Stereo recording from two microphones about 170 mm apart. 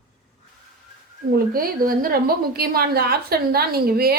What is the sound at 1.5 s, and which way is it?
A woman's voice, 55° right (ahead or behind).